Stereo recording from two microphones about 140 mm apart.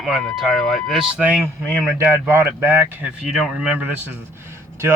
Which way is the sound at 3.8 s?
15° right (ahead or behind).